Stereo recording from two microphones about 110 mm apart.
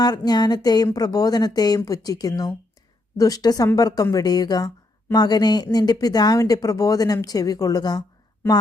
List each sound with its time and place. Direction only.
0.0 s speech: 40° left (ahead or behind)